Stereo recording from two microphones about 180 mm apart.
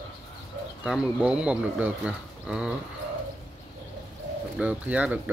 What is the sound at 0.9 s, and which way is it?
Speech, 5° right (ahead or behind).